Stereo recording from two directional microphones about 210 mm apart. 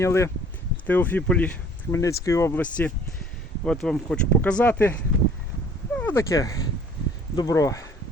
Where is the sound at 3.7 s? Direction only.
5° left (ahead or behind).